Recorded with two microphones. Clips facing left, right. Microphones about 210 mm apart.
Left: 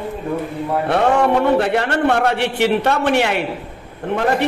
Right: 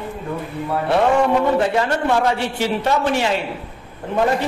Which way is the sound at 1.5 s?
65° left (ahead or behind).